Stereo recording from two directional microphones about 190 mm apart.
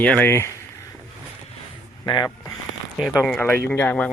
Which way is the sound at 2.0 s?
20° left (ahead or behind).